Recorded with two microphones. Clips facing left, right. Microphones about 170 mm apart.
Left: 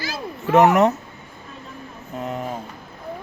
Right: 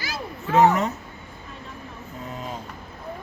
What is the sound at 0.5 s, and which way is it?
Speech, 70° left (ahead or behind).